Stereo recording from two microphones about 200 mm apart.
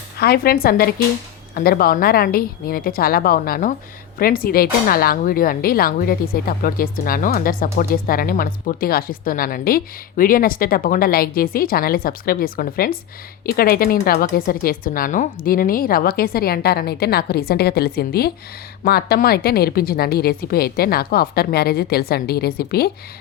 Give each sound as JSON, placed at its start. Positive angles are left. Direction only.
{"t": 0.2, "sound": "speech", "side_deg": 50}